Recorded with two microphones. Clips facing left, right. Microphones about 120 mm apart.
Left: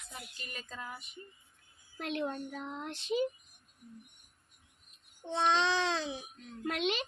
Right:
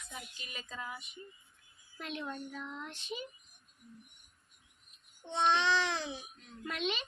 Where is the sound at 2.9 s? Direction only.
90° left.